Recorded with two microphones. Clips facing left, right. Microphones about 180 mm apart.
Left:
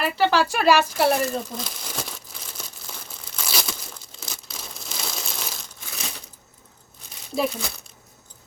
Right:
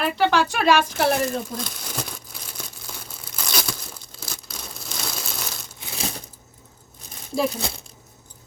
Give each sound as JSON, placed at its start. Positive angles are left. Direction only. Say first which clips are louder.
{"t": 0.0, "sound": "speech", "louder": "even", "side_deg": 5}
{"t": 2.6, "sound": "crumpling", "louder": "right 2 dB", "side_deg": -5}
{"t": 3.4, "sound": "tearing", "louder": "right 1 dB", "side_deg": 5}
{"t": 5.8, "sound": "crushing", "louder": "right 7 dB", "side_deg": -30}